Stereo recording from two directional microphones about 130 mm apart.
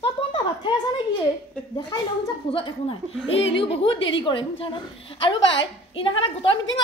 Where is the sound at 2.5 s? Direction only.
45° left (ahead or behind).